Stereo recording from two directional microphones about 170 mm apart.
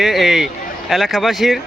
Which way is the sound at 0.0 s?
Centre (ahead or behind).